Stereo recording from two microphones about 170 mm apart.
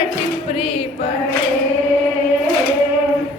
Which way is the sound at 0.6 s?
35° left (ahead or behind).